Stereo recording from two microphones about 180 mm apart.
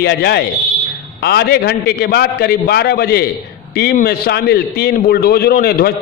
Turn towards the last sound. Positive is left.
turn(degrees=60)  # may be behind; listen again after turning